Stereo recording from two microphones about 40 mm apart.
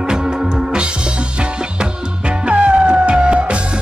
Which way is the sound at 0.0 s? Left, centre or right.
Centre.